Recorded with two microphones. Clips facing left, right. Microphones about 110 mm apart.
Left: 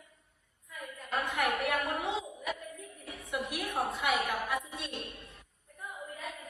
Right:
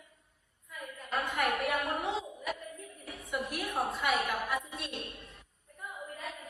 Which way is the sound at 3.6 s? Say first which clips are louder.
Even; 25° right (ahead or behind).